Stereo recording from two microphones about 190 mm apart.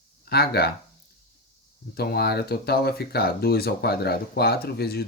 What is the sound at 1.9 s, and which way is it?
Speech, 55° left (ahead or behind).